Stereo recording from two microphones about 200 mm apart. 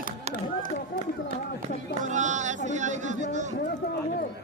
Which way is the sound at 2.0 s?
35° right (ahead or behind).